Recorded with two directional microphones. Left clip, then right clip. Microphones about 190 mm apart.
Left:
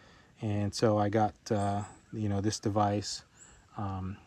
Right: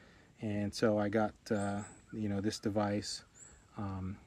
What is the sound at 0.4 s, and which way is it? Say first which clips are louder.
Speech: left 4 dB; 20° left (ahead or behind).